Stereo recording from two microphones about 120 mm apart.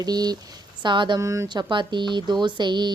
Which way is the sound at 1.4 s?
40° right (ahead or behind).